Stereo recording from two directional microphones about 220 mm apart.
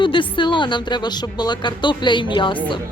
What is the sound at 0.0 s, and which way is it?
A woman's voice, 20° left (ahead or behind).